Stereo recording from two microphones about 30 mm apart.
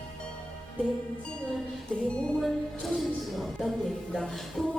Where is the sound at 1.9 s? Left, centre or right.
Left.